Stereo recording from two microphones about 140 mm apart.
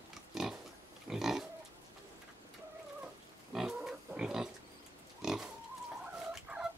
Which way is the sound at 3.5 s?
Centre (ahead or behind).